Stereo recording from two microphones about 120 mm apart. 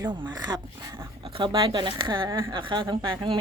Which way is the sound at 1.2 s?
50° right (ahead or behind).